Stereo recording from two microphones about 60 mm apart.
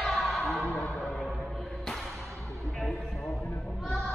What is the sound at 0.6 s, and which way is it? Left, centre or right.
Music, left.